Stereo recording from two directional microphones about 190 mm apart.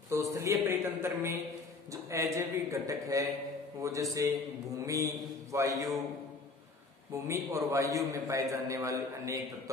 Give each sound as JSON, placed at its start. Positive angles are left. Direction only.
{"t": 0.1, "sound": "a man's voice", "side_deg": -15}
{"t": 7.2, "sound": "a man's voice", "side_deg": -15}